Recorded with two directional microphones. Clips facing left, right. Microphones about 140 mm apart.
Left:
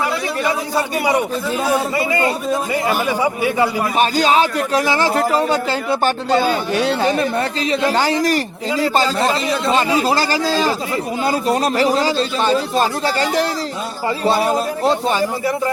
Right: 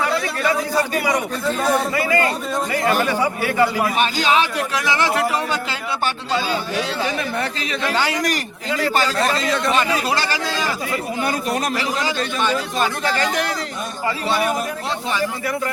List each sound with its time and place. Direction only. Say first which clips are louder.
1.5 s a man's voice: right 2 dB; 5° left (ahead or behind)
2.0 s a man's voice: left 1 dB; 20° left (ahead or behind)
2.5 s a man's voice: left 2 dB; 5° left (ahead or behind)
3.9 s speech: left 4 dB; 40° left (ahead or behind); by 7.2 s 55° left (ahead or behind)
7.2 s speech: left 5 dB; 35° left (ahead or behind)
14.3 s speech: left 5 dB; 30° left (ahead or behind)